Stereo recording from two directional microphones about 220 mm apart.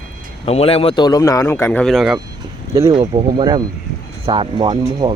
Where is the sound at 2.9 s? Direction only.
20° right (ahead or behind).